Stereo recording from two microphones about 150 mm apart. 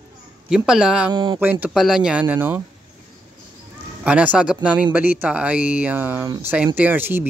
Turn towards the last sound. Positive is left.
turn(degrees=-15)  # may be behind; listen again after turning